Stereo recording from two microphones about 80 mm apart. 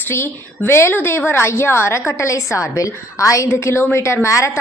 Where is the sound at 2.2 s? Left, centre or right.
Left.